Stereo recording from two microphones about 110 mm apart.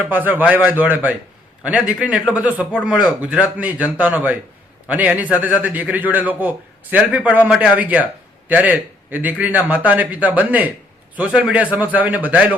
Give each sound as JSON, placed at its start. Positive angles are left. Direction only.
{"t": 0.0, "sound": "a man's voice", "side_deg": -15}